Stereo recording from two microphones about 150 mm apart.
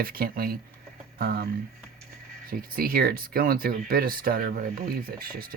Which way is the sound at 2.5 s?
80° right.